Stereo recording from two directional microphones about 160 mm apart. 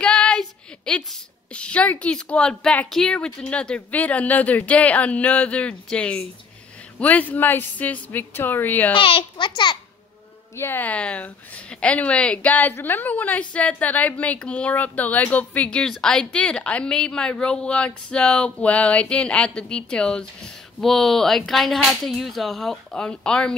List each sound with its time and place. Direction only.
0.0 s a sound: 5° left (ahead or behind)
1.5 s a woman's voice: 5° left (ahead or behind)
8.9 s a child's voice: 35° left (ahead or behind)
10.5 s a woman's voice: 15° left (ahead or behind)